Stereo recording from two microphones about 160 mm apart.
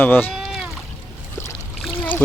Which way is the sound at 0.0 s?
10° left (ahead or behind).